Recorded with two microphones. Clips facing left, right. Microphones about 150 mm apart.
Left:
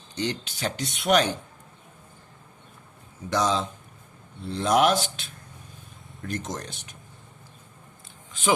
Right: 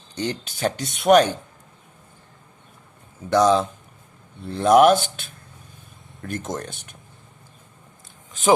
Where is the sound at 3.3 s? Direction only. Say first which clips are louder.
Right 8 dB; 50° right (ahead or behind).